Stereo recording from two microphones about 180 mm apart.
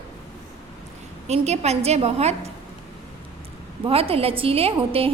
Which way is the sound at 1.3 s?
35° right (ahead or behind).